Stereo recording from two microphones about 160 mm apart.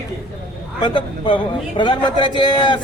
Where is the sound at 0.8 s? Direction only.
30° left (ahead or behind).